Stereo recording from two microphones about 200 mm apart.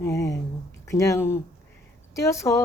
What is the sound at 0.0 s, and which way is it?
Speech, 15° left (ahead or behind).